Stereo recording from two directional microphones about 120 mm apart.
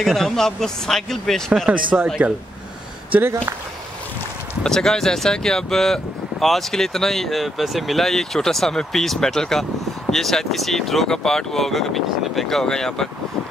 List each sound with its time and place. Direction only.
0.0 s speech: centre (ahead or behind)
1.7 s speech: 10° right (ahead or behind)
4.6 s speech: 5° left (ahead or behind)